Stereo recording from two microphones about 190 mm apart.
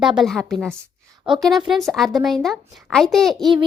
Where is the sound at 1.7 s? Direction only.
Centre (ahead or behind).